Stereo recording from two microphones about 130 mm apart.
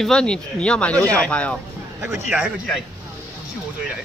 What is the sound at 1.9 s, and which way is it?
Speech, 20° right (ahead or behind).